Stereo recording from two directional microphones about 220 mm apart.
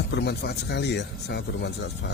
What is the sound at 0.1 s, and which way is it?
Speech, 50° left (ahead or behind).